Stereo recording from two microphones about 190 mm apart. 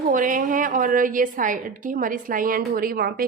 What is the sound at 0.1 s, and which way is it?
A woman's voice, 45° right (ahead or behind).